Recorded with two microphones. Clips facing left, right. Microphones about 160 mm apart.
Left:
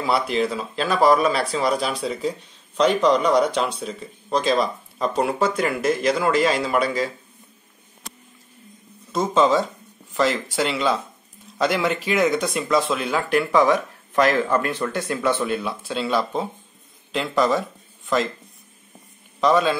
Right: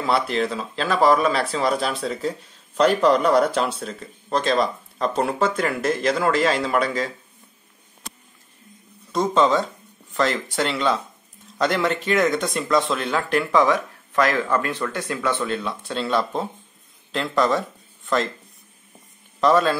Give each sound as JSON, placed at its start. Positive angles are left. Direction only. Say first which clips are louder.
{"t": 0.0, "sound": "speech", "louder": "even", "side_deg": 0}
{"t": 9.1, "sound": "speech", "louder": "even", "side_deg": 5}
{"t": 19.4, "sound": "speech", "louder": "right 1 dB", "side_deg": 0}